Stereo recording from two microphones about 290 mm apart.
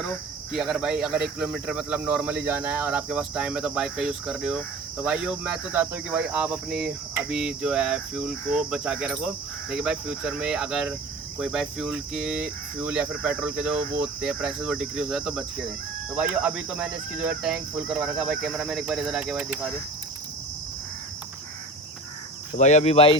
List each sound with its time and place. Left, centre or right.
0.5 s speech: centre
22.5 s cricket: left